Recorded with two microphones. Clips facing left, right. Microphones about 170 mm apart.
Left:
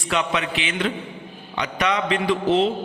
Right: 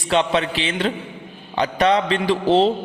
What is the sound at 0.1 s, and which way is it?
A man's voice, 30° right (ahead or behind).